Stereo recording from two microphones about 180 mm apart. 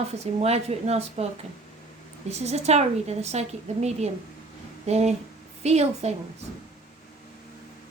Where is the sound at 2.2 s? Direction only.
35° right (ahead or behind).